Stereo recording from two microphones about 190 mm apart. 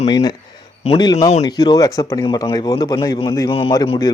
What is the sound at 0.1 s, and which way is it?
A man's voice, 20° left (ahead or behind).